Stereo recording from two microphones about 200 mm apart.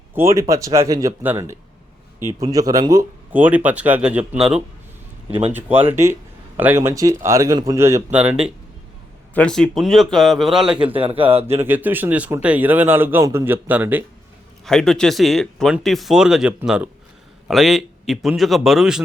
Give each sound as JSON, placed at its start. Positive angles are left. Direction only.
{"t": 0.1, "sound": "speech", "side_deg": -15}
{"t": 10.9, "sound": "speech", "side_deg": -25}
{"t": 11.5, "sound": "speech", "side_deg": -10}
{"t": 14.6, "sound": "speech", "side_deg": 5}